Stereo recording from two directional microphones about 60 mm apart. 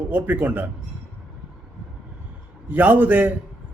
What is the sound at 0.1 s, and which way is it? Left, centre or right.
Speech, right.